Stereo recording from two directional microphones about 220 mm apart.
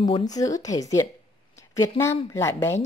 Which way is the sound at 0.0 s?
20° left (ahead or behind).